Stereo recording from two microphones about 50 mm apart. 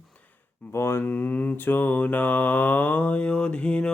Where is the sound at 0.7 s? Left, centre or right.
Left.